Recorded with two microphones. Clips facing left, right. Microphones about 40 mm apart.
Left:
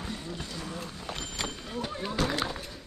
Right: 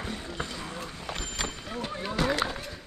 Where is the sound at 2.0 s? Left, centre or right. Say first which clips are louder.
Right 3 dB; centre.